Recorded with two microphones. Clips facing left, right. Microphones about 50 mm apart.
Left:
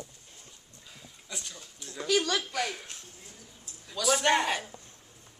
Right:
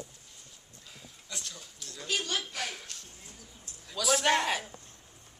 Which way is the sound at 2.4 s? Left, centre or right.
Centre.